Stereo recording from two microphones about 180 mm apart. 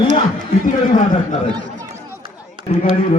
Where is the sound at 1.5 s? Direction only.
25° right (ahead or behind).